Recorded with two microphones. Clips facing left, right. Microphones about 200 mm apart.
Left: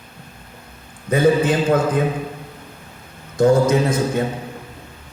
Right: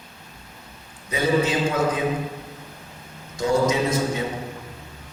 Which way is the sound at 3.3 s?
55° left (ahead or behind).